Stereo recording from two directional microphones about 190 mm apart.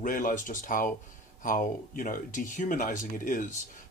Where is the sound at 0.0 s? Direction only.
45° left (ahead or behind).